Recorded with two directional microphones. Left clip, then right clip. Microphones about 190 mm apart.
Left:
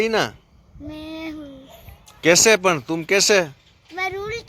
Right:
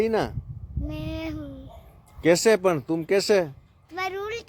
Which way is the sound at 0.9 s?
30° right (ahead or behind).